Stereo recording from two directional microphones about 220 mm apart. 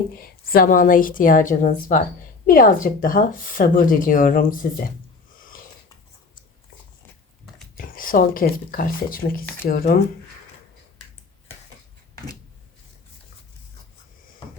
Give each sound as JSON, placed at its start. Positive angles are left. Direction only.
{"t": 0.2, "sound": "speech", "side_deg": 40}
{"t": 7.8, "sound": "speech", "side_deg": 40}
{"t": 12.1, "sound": "a sound", "side_deg": 15}